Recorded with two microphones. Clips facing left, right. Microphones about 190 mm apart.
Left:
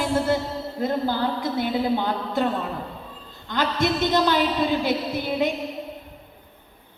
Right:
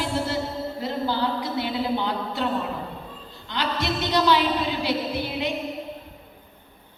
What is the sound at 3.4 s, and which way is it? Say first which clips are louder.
Speech: left 4 dB; 50° left (ahead or behind).